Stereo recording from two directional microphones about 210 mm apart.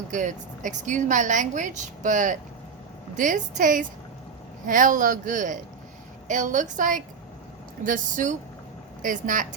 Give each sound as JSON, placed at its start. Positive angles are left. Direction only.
{"t": 0.1, "sound": "speech", "side_deg": -35}